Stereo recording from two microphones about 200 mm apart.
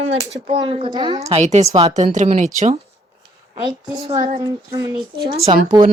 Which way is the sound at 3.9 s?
30° right (ahead or behind).